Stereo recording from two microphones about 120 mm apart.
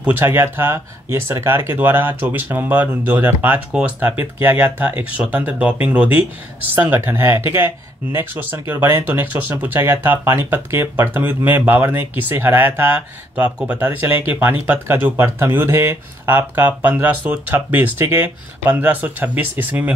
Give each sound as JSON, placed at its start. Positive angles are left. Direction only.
{"t": 0.0, "sound": "speech", "side_deg": -15}